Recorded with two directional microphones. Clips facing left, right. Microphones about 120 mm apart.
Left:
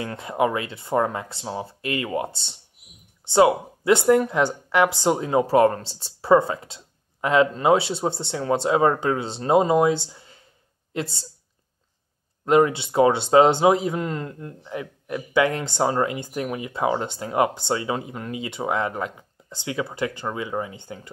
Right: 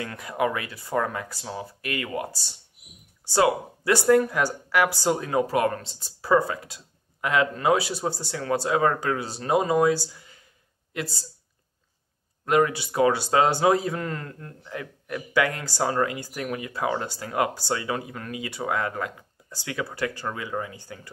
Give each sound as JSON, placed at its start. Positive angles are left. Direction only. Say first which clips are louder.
{"t": 0.0, "sound": "a woman's voice", "louder": "left 3 dB", "side_deg": 25}
{"t": 12.4, "sound": "speech", "louder": "left 4 dB", "side_deg": 25}